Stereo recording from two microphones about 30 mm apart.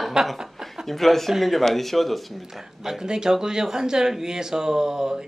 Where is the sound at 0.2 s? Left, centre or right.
Centre.